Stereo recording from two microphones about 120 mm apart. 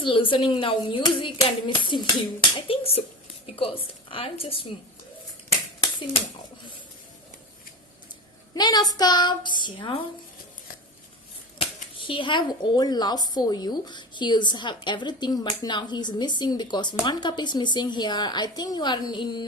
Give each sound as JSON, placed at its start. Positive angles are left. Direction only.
{"t": 0.0, "sound": "a woman's voice", "side_deg": 45}
{"t": 8.5, "sound": "speech", "side_deg": 35}
{"t": 11.6, "sound": "speech", "side_deg": 45}